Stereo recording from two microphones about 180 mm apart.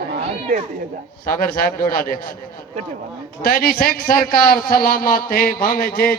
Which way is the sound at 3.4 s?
55° left (ahead or behind).